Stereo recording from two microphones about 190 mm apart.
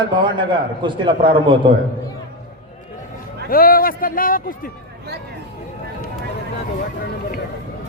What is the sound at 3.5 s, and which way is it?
A man's voice, 50° left (ahead or behind).